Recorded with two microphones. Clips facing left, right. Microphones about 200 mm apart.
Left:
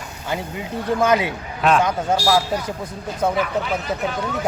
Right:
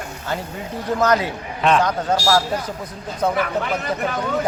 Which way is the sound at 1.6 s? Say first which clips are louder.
Even; 5° left (ahead or behind).